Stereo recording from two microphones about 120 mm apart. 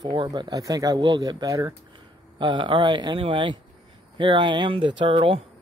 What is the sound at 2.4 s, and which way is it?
Speech, 40° right (ahead or behind).